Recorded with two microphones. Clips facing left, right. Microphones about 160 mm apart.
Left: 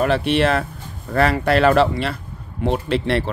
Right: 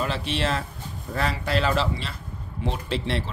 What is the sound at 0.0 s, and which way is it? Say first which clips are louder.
Speech: left 9 dB; 60° left (ahead or behind).